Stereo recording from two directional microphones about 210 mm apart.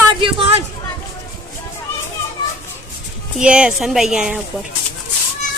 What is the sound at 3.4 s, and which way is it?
Speech, 5° right (ahead or behind).